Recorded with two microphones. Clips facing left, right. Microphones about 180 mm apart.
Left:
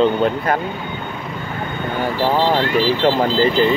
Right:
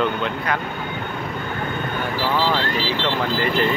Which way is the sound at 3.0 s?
35° left (ahead or behind).